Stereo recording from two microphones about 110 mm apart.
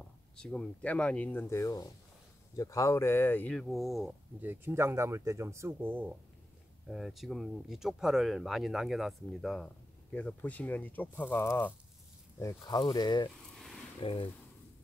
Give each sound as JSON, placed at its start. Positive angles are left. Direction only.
{"t": 0.4, "sound": "speech", "side_deg": 5}
{"t": 1.6, "sound": "speech", "side_deg": 35}
{"t": 3.5, "sound": "speech", "side_deg": 0}
{"t": 4.4, "sound": "speech", "side_deg": -20}
{"t": 6.9, "sound": "speech", "side_deg": 0}
{"t": 10.1, "sound": "speech", "side_deg": 15}
{"t": 12.4, "sound": "speech", "side_deg": 35}
{"t": 13.9, "sound": "speech", "side_deg": 55}